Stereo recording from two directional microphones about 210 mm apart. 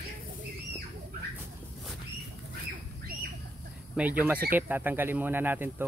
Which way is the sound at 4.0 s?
5° right (ahead or behind).